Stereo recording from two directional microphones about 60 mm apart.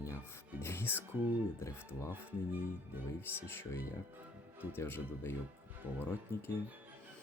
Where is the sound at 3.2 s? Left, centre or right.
Left.